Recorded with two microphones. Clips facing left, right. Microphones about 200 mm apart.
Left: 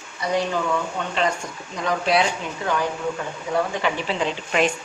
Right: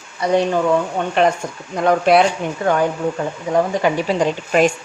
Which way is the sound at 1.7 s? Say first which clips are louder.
Right 8 dB; 55° right (ahead or behind).